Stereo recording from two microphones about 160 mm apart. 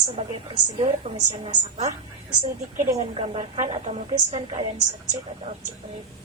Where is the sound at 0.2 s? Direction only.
35° right (ahead or behind).